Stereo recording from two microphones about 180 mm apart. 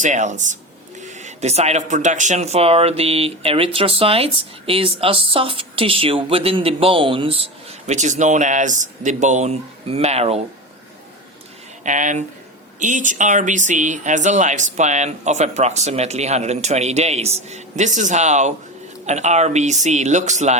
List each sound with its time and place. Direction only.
0.0 s speech: 40° right (ahead or behind)
11.8 s speech: 45° right (ahead or behind)